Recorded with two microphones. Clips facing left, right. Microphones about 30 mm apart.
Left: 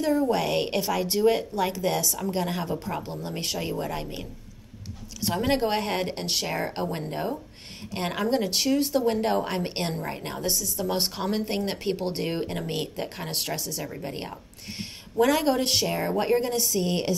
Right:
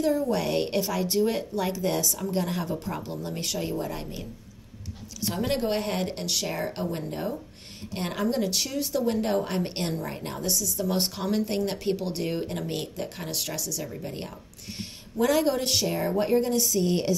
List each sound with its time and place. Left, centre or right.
0.3 s speech: centre
13.9 s a sound: left
15.4 s speech: left